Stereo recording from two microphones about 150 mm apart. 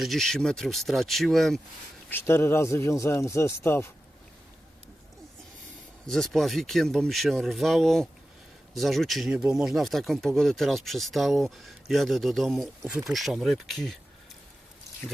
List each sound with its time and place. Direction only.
0.0 s speech: centre (ahead or behind)
2.0 s a man's voice: 15° left (ahead or behind)
6.1 s speech: centre (ahead or behind)